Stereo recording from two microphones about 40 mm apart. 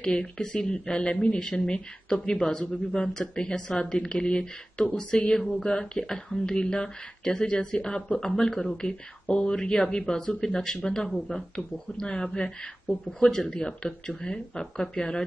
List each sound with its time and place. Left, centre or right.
0.0 s speech: left
9.3 s speech: left